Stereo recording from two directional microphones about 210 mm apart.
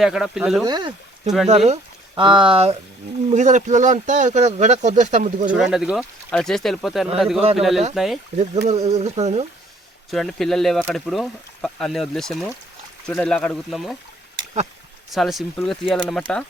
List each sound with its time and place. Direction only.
0.0 s speech: centre (ahead or behind)
0.6 s speech: 20° right (ahead or behind)
5.5 s speech: 5° right (ahead or behind)
8.4 s speech: 35° right (ahead or behind)
10.1 s speech: centre (ahead or behind)
15.1 s speech: centre (ahead or behind)